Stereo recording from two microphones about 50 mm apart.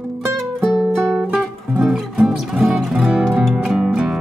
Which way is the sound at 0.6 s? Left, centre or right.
Centre.